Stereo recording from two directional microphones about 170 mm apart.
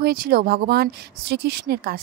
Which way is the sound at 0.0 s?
60° right (ahead or behind).